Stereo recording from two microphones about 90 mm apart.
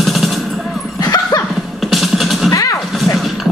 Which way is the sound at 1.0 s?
40° left (ahead or behind).